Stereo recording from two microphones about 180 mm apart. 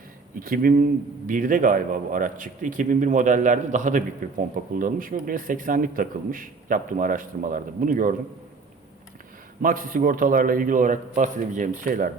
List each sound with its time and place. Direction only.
0.3 s a man's voice: 50° right (ahead or behind)
9.6 s a man's voice: 50° right (ahead or behind)